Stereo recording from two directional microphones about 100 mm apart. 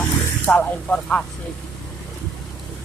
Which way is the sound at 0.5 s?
10° left (ahead or behind).